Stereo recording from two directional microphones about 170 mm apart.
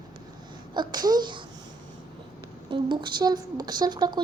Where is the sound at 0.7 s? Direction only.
25° right (ahead or behind).